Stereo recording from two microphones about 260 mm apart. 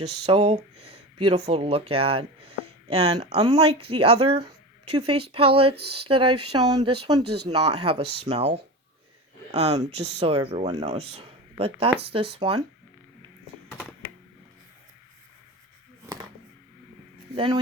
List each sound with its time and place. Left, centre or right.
0.3 s speech: right
9.5 s speech: right
11.1 s a sound: right
11.9 s speech: right
12.4 s speech: right
17.3 s speech: centre